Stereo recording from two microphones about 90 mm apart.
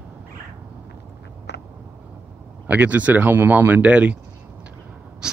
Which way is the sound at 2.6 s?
15° right (ahead or behind).